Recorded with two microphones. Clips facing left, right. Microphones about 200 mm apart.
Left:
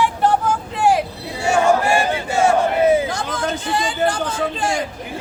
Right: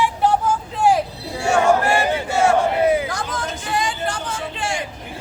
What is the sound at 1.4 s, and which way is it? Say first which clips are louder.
Chant: left 1 dB; 5° left (ahead or behind).